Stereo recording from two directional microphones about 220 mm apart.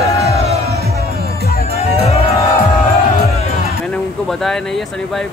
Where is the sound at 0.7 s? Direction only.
45° right (ahead or behind).